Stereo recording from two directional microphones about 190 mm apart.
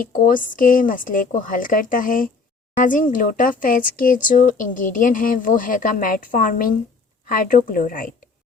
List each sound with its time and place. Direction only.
0.0 s speech: 45° left (ahead or behind)